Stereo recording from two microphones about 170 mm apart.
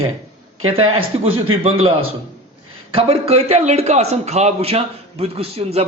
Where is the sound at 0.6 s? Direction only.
35° right (ahead or behind).